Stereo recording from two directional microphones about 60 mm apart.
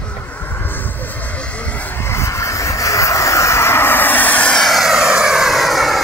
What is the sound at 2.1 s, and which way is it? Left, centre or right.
Vehicle, left.